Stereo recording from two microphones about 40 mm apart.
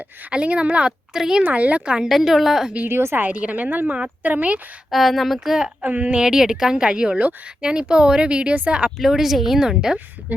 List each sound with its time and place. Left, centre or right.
0.3 s speech: right
0.9 s a woman's voice: centre
1.5 s speech: right
2.0 s a woman's voice: centre
2.8 s a woman's voice: right
3.2 s speech: right
4.9 s speech: centre
5.8 s speech: right
6.2 s speech: centre; by 8.9 s right
9.0 s a woman's voice: centre